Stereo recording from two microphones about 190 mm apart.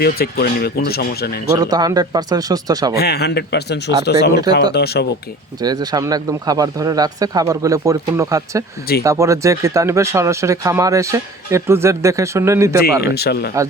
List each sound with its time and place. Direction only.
0.0 s speech: 55° left (ahead or behind)
1.5 s speech: 20° right (ahead or behind)
2.9 s speech: 55° left (ahead or behind)
5.5 s speech: 20° right (ahead or behind)
12.8 s speech: 55° left (ahead or behind)